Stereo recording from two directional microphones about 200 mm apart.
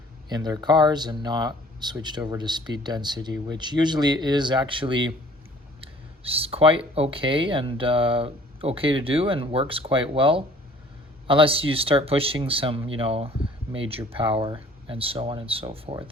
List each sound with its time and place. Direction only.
0.3 s speech: 20° right (ahead or behind)